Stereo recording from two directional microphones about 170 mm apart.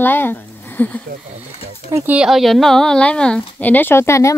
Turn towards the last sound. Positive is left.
turn(degrees=15)  # may be behind; listen again after turning